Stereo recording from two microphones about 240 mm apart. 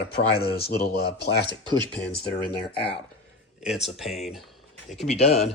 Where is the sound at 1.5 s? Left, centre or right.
Centre.